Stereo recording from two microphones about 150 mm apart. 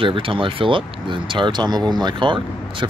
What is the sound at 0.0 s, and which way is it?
Speech, 35° right (ahead or behind).